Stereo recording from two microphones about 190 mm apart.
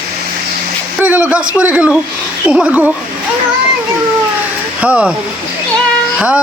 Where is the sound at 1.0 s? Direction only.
5° right (ahead or behind).